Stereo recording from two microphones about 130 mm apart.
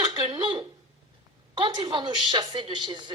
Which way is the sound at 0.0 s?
35° right (ahead or behind).